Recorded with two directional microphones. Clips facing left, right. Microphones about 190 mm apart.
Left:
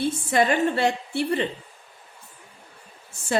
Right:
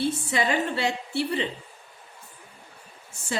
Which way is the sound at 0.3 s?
50° left (ahead or behind).